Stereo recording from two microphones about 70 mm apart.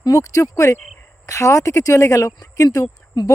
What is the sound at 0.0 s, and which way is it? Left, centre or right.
Speech, left.